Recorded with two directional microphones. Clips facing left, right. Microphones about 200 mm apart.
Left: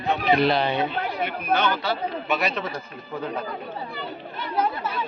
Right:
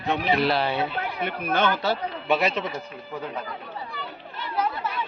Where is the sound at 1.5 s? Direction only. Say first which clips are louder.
Right 2 dB; 45° right (ahead or behind).